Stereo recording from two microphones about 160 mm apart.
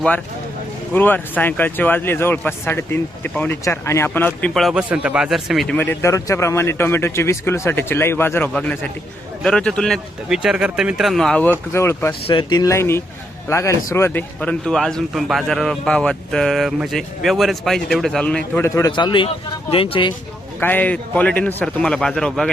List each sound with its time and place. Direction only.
0.9 s speech: 10° left (ahead or behind)
5.7 s a man's voice: 15° left (ahead or behind)
11.7 s speech: 15° left (ahead or behind)
12.3 s a man's voice: 30° left (ahead or behind); by 18.6 s 5° left (ahead or behind)
18.6 s speech: 20° left (ahead or behind)
20.6 s speech: 10° left (ahead or behind)